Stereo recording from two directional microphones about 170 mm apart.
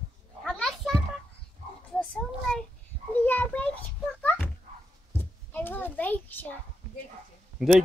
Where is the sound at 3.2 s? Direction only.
10° left (ahead or behind).